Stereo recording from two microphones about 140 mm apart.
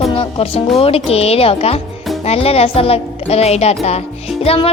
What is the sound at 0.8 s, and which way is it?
A woman's voice, 45° left (ahead or behind).